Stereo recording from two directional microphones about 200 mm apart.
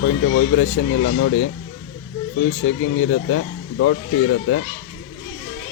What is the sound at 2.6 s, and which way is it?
Speech, 70° left (ahead or behind).